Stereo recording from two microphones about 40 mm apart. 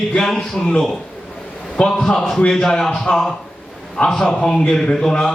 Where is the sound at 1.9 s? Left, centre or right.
Centre.